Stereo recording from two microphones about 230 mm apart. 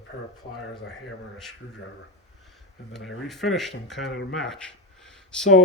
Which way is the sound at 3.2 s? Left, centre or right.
Centre.